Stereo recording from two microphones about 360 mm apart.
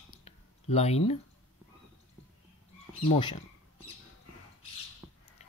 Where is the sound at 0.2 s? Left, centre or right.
Centre.